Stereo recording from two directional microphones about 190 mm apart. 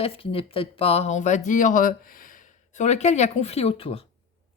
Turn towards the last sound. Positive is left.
turn(degrees=30)  # may be behind; listen again after turning